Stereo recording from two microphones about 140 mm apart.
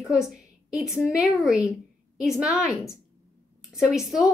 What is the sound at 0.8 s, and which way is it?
A woman's voice, 5° right (ahead or behind).